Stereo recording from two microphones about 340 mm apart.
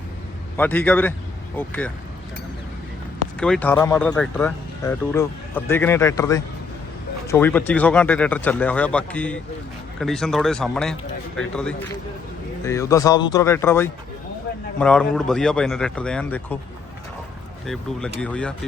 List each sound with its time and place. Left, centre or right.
0.5 s speech: centre
3.4 s speech: centre
17.7 s speech: centre